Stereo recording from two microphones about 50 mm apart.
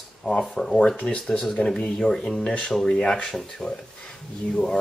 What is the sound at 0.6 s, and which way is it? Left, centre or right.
Speech, centre.